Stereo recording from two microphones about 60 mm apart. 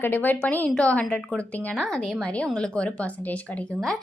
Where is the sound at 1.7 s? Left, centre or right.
Centre.